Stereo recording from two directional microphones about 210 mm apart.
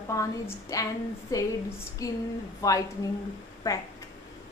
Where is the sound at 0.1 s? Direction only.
15° left (ahead or behind).